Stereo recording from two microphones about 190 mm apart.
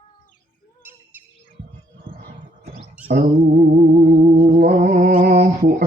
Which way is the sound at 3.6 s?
60° right (ahead or behind).